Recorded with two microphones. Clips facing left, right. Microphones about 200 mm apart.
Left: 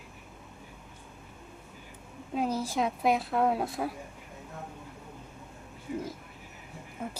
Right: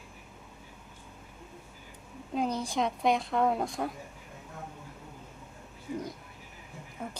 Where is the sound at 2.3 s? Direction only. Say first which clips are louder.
Left 1 dB; 5° left (ahead or behind).